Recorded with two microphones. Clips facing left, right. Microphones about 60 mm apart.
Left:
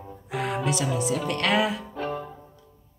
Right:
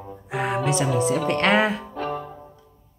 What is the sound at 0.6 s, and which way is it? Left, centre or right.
Speech, right.